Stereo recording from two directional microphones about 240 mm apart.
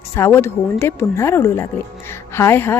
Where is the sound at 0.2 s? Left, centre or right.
Centre.